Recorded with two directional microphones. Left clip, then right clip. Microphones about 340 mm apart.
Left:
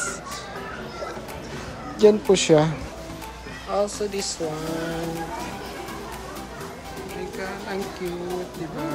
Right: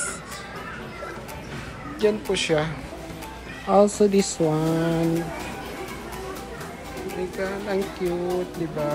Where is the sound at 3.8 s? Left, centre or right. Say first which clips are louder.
Right 7 dB; centre.